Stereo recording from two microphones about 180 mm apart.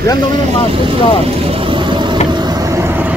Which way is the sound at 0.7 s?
30° right (ahead or behind).